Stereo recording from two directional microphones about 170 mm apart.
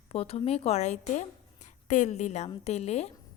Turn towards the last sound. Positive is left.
turn(degrees=40)  # may be behind; listen again after turning